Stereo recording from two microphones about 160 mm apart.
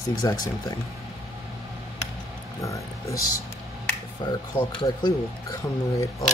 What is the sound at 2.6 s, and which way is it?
Speech, 20° left (ahead or behind).